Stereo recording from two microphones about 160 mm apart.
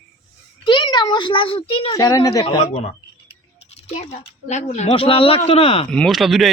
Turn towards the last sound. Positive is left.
turn(degrees=0)  # may be behind; listen again after turning